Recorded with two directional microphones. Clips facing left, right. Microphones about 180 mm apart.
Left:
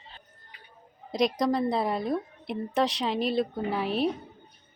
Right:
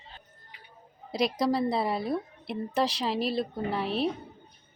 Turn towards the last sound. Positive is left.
turn(degrees=0)  # may be behind; listen again after turning